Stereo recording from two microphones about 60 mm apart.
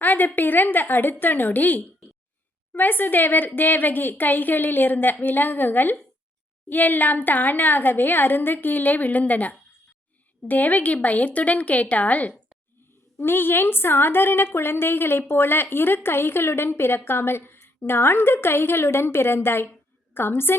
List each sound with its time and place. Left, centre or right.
0.0 s a sound: left
0.3 s a woman's voice: left
13.1 s a woman's voice: left